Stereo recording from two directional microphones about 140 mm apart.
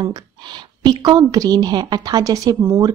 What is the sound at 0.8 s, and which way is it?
A woman's voice, 30° right (ahead or behind).